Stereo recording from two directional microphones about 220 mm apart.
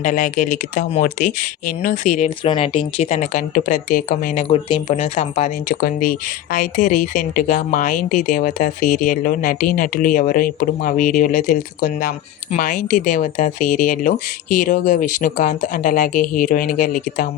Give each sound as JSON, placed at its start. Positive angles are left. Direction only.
{"t": 0.0, "sound": "speech", "side_deg": 35}